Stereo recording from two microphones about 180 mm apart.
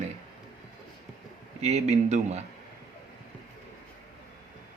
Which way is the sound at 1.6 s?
35° right (ahead or behind).